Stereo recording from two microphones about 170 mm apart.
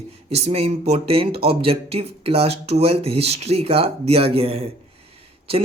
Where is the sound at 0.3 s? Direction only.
35° right (ahead or behind).